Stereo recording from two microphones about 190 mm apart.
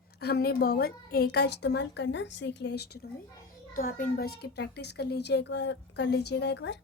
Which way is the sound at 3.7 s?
50° left (ahead or behind).